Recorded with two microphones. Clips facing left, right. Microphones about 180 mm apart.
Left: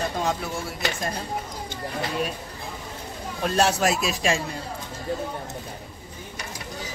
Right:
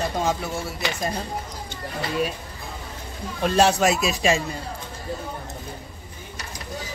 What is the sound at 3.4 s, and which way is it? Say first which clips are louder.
Speech: right 3 dB; centre (ahead or behind).